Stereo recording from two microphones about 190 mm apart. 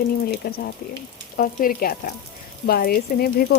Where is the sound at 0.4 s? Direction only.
55° left (ahead or behind).